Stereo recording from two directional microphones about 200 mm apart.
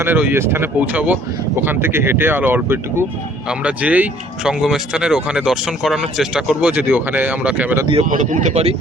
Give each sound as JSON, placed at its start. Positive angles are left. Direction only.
{"t": 0.0, "sound": "speech", "side_deg": -10}
{"t": 8.0, "sound": "speech", "side_deg": -40}